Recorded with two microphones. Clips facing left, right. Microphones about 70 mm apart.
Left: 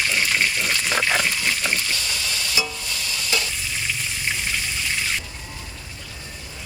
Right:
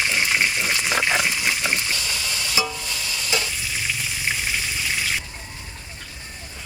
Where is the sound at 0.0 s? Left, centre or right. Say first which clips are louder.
Even; centre.